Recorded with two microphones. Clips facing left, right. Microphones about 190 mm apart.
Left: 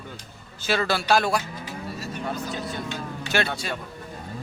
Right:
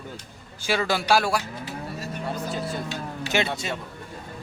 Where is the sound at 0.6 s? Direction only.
10° right (ahead or behind).